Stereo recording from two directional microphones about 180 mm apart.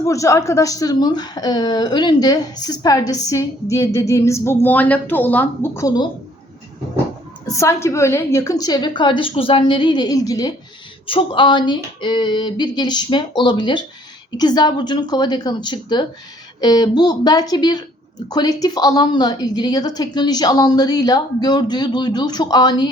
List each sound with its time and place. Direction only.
0.1 s a woman's voice: 15° left (ahead or behind)
7.4 s a woman's voice: 15° left (ahead or behind)